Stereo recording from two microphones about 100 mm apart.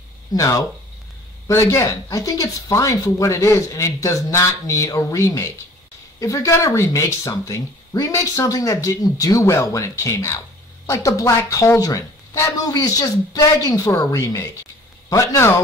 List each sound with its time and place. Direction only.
0.3 s a man's voice: 35° left (ahead or behind)